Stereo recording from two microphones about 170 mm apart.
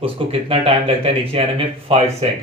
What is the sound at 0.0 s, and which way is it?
A man's voice, 35° right (ahead or behind).